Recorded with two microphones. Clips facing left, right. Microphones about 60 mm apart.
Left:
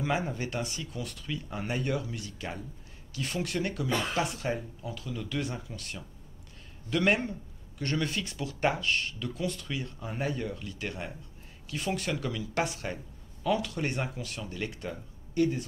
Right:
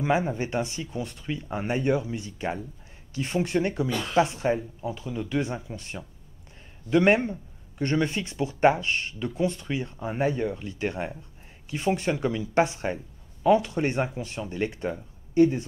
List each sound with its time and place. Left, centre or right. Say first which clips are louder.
0.0 s speech: right 6 dB; right